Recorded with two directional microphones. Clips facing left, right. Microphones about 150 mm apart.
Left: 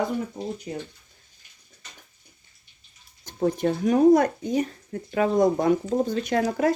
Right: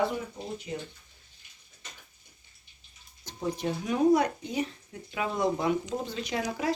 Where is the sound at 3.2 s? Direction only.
50° left (ahead or behind).